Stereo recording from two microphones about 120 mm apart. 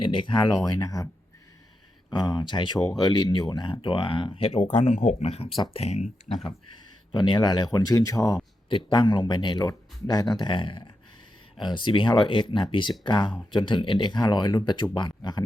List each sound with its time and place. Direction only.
0.0 s speech: 45° left (ahead or behind)
0.5 s speech: 30° left (ahead or behind)
2.0 s speech: 35° left (ahead or behind); by 6.3 s 60° left (ahead or behind)
7.1 s speech: 40° left (ahead or behind)
8.7 s speech: 40° left (ahead or behind)